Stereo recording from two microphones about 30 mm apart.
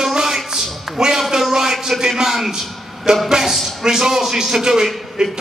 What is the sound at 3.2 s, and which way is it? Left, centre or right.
A man's voice, right.